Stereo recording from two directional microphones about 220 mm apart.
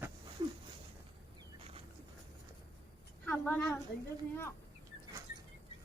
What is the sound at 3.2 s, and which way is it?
Speech, 5° left (ahead or behind).